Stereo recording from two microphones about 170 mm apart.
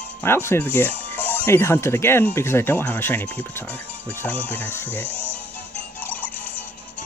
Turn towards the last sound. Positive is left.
turn(degrees=10)  # may be behind; listen again after turning